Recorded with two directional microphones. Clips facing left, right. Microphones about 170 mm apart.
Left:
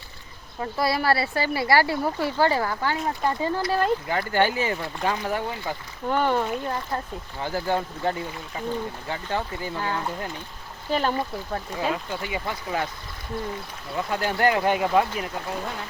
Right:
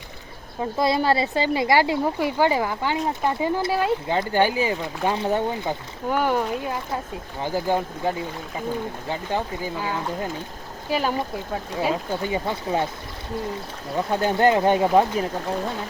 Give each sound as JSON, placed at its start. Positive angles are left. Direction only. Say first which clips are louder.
{"t": 0.6, "sound": "speech", "louder": "right 3 dB", "side_deg": -20}
{"t": 4.1, "sound": "speech", "louder": "right 2 dB", "side_deg": -20}
{"t": 5.1, "sound": "speech", "louder": "right 5 dB", "side_deg": -25}
{"t": 6.1, "sound": "speech", "louder": "right 1 dB", "side_deg": -10}
{"t": 12.1, "sound": "speech", "louder": "right 5 dB", "side_deg": -30}
{"t": 13.9, "sound": "speech", "louder": "right 4 dB", "side_deg": -25}